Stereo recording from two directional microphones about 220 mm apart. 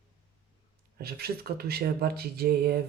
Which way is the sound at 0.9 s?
45° right (ahead or behind).